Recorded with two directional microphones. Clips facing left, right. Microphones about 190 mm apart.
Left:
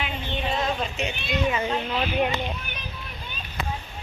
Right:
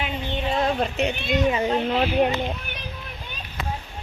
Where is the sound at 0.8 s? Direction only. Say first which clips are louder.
Right 5 dB; 60° right (ahead or behind).